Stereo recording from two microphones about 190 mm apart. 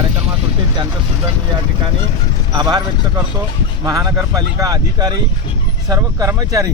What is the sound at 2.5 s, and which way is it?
Speech, 20° right (ahead or behind).